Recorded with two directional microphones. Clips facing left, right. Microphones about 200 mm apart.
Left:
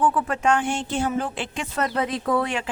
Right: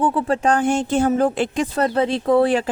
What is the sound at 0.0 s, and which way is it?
A woman's voice, 30° right (ahead or behind).